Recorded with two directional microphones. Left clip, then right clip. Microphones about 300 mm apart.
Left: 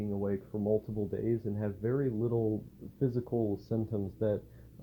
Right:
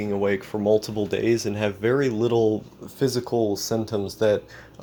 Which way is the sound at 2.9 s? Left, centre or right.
Centre.